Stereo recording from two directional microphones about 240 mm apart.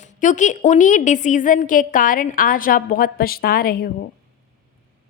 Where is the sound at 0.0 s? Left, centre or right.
Left.